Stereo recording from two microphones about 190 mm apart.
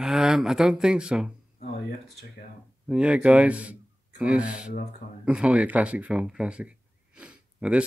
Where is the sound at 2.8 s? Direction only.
5° right (ahead or behind).